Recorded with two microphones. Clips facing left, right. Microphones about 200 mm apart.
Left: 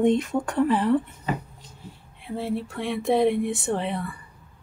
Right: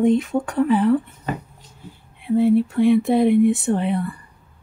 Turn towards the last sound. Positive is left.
turn(degrees=0)  # may be behind; listen again after turning